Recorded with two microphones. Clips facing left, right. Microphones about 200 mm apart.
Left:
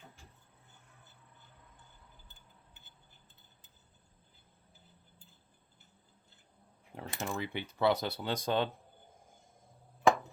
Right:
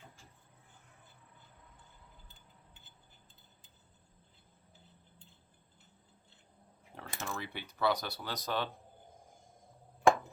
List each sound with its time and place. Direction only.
6.9 s speech: 20° left (ahead or behind)